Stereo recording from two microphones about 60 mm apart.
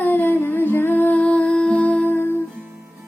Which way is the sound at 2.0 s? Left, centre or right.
Left.